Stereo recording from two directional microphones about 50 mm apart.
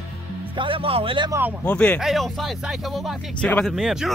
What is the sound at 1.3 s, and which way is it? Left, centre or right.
Speech, right.